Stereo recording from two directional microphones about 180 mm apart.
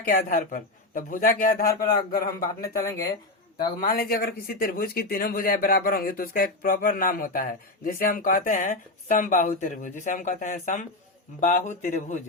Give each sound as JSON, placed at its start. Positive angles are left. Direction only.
{"t": 0.0, "sound": "speech", "side_deg": 45}
{"t": 3.8, "sound": "speech", "side_deg": 55}